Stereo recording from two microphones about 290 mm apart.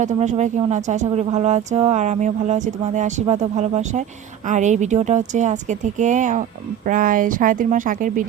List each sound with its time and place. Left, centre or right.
0.0 s speech: right